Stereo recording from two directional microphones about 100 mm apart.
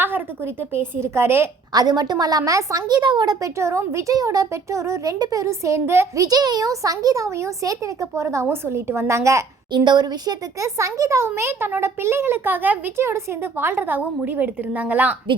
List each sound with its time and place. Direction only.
0.0 s a child's voice: 20° right (ahead or behind)
1.7 s speech: 40° right (ahead or behind)
3.6 s speech: 30° right (ahead or behind)
6.2 s speech: 40° right (ahead or behind)
9.7 s a woman's voice: 50° right (ahead or behind)
10.8 s a child's voice: 30° right (ahead or behind); by 15.1 s 15° right (ahead or behind)